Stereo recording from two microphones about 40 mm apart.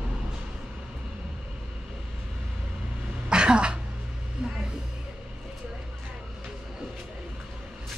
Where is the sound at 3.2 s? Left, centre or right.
Right.